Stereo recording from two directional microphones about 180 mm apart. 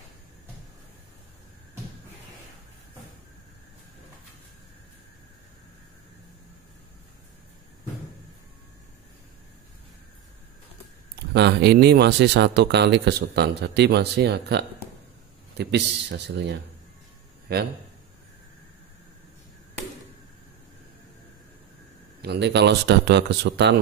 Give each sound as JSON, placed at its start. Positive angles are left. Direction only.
{"t": 11.1, "sound": "speech", "side_deg": -70}
{"t": 17.5, "sound": "a man's voice", "side_deg": -60}
{"t": 22.2, "sound": "speech", "side_deg": -70}